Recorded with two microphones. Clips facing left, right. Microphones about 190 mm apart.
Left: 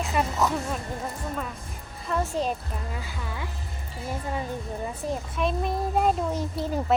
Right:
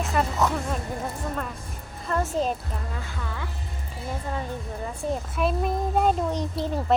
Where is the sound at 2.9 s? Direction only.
10° left (ahead or behind).